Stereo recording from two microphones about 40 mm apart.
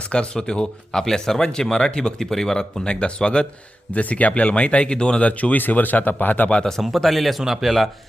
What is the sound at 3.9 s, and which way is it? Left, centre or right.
Speech, left.